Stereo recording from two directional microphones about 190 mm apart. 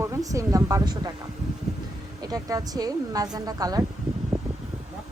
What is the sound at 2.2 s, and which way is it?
Speech, 20° right (ahead or behind).